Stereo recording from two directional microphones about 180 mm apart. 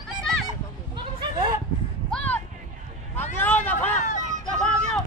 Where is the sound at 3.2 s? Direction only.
10° left (ahead or behind).